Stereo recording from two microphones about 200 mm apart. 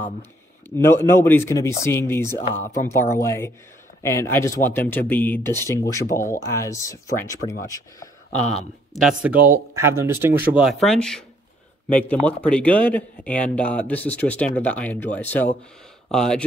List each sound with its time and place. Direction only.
0.7 s a man's voice: 15° left (ahead or behind)
8.9 s a man's voice: 5° right (ahead or behind)